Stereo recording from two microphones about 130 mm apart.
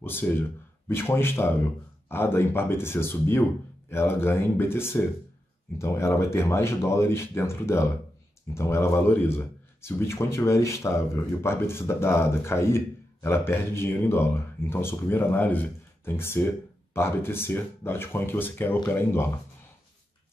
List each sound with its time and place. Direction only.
0.0 s a man's voice: 15° left (ahead or behind)